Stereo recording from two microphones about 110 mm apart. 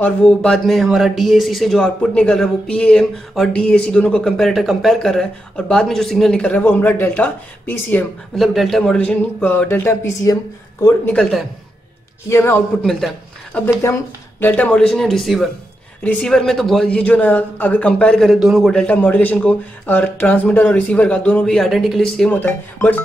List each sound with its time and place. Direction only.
0.0 s a man's voice: 10° left (ahead or behind)
8.4 s a man's voice: centre (ahead or behind); by 10.3 s 25° left (ahead or behind)
11.1 s speech: 5° left (ahead or behind)
12.3 s a man's voice: 20° left (ahead or behind)
12.8 s speech: 5° left (ahead or behind)
16.0 s a man's voice: 15° left (ahead or behind)
22.3 s a man's voice: 15° left (ahead or behind)